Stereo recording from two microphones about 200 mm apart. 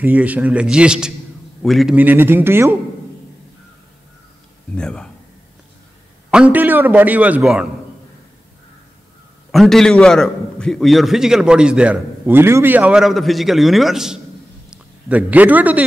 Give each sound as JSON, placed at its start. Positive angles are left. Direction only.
{"t": 0.0, "sound": "a man's voice", "side_deg": -5}
{"t": 4.7, "sound": "a man's voice", "side_deg": 5}
{"t": 6.3, "sound": "a man's voice", "side_deg": -5}
{"t": 9.5, "sound": "a man's voice", "side_deg": 0}